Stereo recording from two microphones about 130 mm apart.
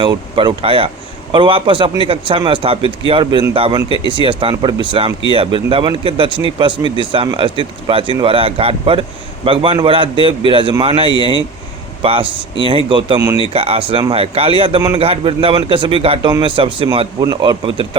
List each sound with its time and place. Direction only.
0.0 s a man's voice: 35° right (ahead or behind)
17.2 s a man's voice: 30° right (ahead or behind)